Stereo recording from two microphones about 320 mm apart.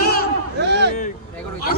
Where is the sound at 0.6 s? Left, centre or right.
Right.